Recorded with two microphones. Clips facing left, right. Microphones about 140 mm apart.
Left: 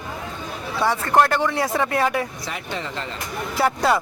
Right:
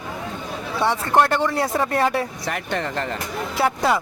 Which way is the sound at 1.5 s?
35° right (ahead or behind).